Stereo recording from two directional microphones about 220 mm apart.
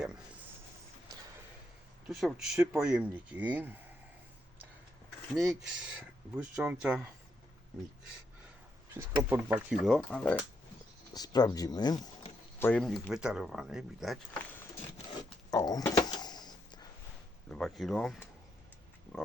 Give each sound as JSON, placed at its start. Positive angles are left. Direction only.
{"t": 2.0, "sound": "speech", "side_deg": 0}
{"t": 5.3, "sound": "speech", "side_deg": 0}
{"t": 9.0, "sound": "speech", "side_deg": -10}
{"t": 11.1, "sound": "speech", "side_deg": 20}
{"t": 15.4, "sound": "a sound", "side_deg": 15}
{"t": 17.5, "sound": "speech", "side_deg": 0}